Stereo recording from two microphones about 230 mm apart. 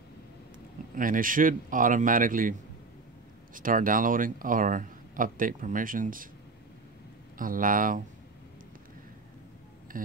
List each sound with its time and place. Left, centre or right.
0.9 s speech: right
3.5 s speech: right
7.3 s speech: right
9.9 s a sound: right